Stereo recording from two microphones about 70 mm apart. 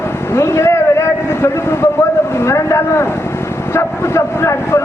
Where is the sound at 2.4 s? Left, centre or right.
Left.